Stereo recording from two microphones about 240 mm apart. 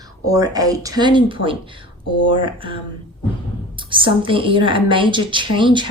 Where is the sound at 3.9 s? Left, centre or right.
Right.